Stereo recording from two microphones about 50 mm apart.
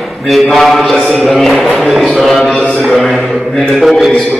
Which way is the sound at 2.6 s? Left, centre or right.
Left.